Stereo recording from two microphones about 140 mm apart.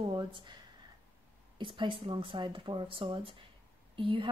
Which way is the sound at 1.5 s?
35° right (ahead or behind).